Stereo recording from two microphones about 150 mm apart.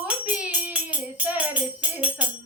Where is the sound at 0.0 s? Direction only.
10° right (ahead or behind).